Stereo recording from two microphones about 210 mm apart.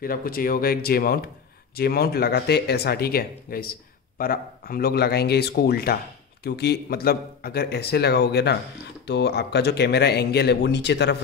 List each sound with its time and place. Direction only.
0.0 s speech: 45° left (ahead or behind)